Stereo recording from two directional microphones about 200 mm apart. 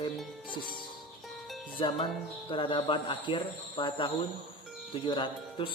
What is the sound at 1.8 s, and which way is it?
Speech, 20° left (ahead or behind).